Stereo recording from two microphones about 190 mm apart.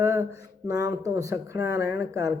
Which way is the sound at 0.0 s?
15° right (ahead or behind).